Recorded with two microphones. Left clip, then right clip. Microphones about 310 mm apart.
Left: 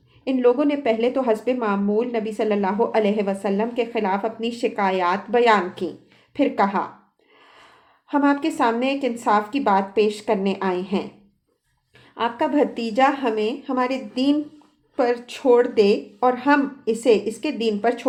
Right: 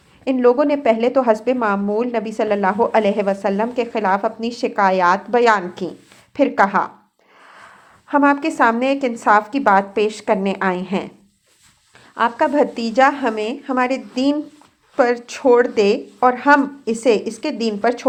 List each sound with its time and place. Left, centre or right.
0.3 s a woman's voice: right
12.1 s a woman's voice: right